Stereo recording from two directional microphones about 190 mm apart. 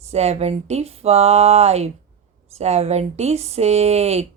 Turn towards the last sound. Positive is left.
turn(degrees=-35)  # may be behind; listen again after turning